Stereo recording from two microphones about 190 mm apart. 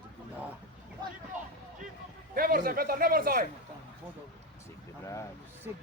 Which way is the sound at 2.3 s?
50° right (ahead or behind).